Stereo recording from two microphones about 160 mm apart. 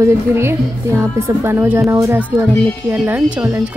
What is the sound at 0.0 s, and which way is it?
A woman's voice, 15° right (ahead or behind).